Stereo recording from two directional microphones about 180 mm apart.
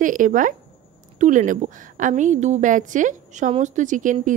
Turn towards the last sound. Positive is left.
turn(degrees=-45)  # may be behind; listen again after turning